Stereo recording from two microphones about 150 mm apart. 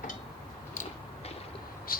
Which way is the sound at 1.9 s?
75° left (ahead or behind).